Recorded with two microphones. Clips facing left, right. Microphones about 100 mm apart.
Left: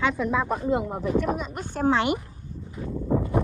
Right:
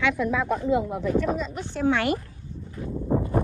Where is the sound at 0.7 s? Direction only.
45° left (ahead or behind).